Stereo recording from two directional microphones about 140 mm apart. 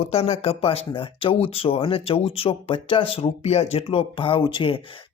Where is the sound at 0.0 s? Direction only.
45° left (ahead or behind).